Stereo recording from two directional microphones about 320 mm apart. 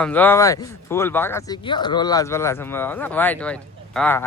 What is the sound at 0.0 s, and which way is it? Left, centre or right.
Speech, centre.